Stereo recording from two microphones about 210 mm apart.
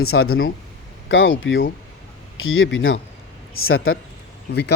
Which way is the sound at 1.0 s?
65° left (ahead or behind).